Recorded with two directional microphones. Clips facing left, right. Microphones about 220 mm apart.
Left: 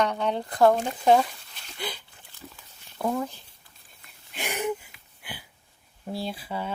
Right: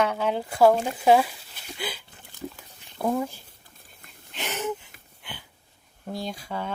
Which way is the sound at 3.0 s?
10° right (ahead or behind).